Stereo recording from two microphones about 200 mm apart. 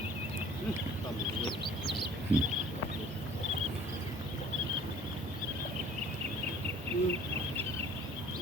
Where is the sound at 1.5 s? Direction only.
25° left (ahead or behind).